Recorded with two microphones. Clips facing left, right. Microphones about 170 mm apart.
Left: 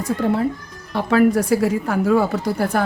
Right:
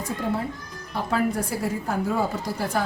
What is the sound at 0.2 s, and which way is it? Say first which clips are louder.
Speech: left 7 dB; 70° left (ahead or behind).